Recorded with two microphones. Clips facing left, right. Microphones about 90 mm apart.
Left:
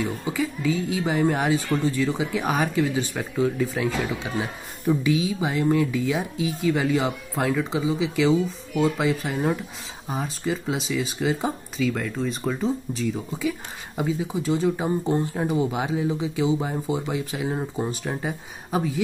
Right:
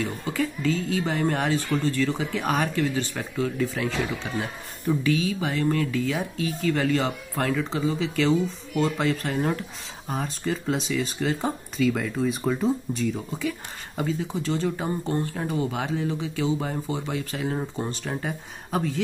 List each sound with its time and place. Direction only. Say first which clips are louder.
0.0 s speech: left 1 dB; 10° left (ahead or behind)